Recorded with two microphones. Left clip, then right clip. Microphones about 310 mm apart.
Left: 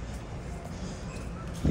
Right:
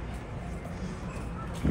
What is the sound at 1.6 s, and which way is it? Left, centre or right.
Vehicle, centre.